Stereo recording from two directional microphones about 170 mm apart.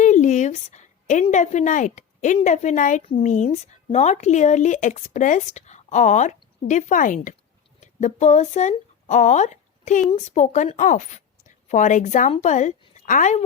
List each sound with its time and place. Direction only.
0.0 s a woman's voice: 45° left (ahead or behind)